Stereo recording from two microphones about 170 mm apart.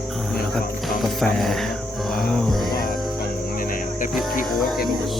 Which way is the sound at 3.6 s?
55° left (ahead or behind).